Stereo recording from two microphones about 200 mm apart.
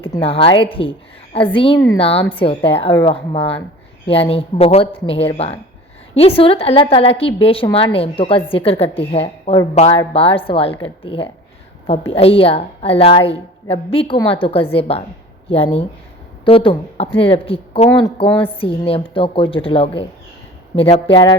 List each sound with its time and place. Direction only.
0.0 s a woman's voice: 25° left (ahead or behind)
16.4 s a woman's voice: 30° left (ahead or behind)